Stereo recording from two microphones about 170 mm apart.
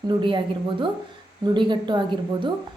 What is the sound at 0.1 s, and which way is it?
A woman's voice, 30° right (ahead or behind).